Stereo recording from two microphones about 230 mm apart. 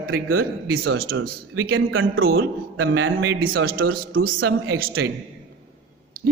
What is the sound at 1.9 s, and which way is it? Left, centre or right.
A man's voice, right.